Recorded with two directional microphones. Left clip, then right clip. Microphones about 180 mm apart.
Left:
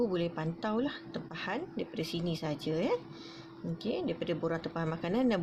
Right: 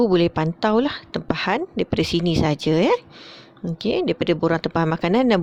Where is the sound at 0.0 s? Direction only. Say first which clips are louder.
Right 14 dB; 55° right (ahead or behind).